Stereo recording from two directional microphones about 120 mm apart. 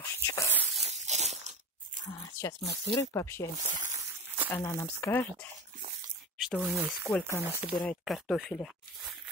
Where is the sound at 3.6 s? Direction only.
70° right (ahead or behind).